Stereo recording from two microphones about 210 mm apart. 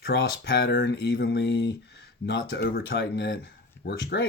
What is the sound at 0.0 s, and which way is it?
Speech, 60° left (ahead or behind).